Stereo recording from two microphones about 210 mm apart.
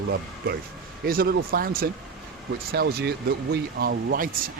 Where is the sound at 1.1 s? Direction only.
45° right (ahead or behind).